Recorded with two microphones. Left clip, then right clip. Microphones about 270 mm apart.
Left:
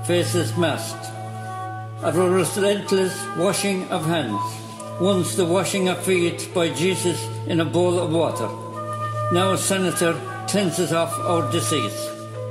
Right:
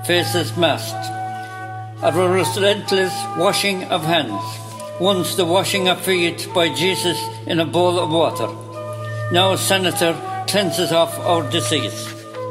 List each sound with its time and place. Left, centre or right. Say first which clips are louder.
0.1 s speech: right 3 dB; right
2.0 s speech: right 3 dB; right